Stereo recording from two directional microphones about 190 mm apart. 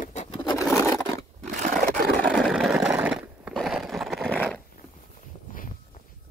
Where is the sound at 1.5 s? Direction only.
40° right (ahead or behind).